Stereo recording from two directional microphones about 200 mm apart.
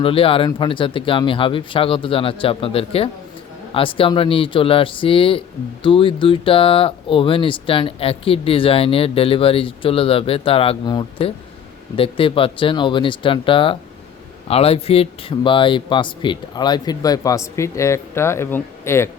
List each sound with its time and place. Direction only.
0.0 s speech: 30° left (ahead or behind); by 19.1 s 10° left (ahead or behind)